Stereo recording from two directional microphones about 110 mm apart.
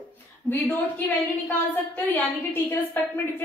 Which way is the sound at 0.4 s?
20° left (ahead or behind).